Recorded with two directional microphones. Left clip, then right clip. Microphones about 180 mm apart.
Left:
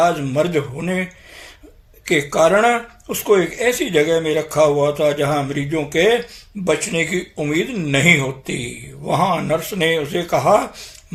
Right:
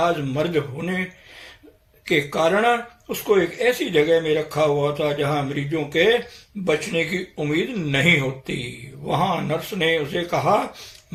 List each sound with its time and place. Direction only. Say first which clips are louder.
0.0 s speech: left 5 dB; 45° left (ahead or behind)
2.0 s speech: left 5 dB; 50° left (ahead or behind)